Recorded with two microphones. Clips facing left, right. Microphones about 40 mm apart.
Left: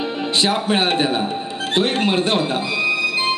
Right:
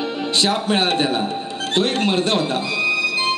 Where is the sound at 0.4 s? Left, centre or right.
Centre.